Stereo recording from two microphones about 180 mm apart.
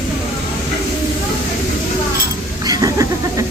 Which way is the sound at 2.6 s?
20° right (ahead or behind).